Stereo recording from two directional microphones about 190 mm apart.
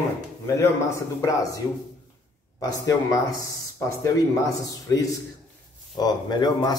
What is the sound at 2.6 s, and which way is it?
Speech, 20° left (ahead or behind).